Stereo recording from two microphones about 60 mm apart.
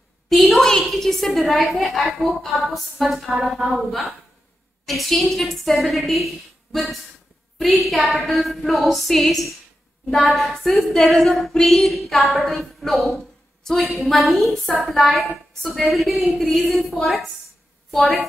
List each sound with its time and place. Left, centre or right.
0.3 s a woman's voice: centre